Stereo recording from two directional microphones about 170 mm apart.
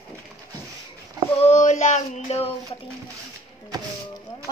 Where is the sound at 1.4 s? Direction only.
40° left (ahead or behind).